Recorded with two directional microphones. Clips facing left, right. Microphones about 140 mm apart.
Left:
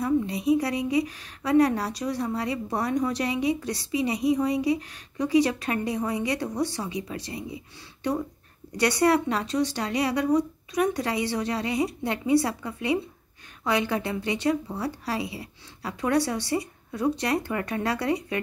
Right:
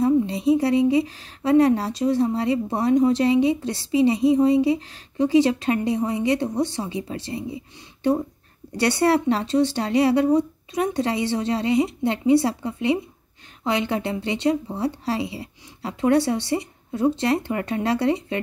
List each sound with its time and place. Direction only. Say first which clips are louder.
0.0 s a woman's voice: right 5 dB; 25° right (ahead or behind)